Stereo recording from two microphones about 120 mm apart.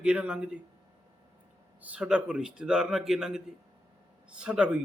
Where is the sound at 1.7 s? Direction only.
10° right (ahead or behind).